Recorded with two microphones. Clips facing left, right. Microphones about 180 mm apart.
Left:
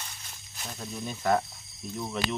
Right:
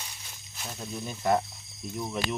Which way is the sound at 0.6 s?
5° right (ahead or behind).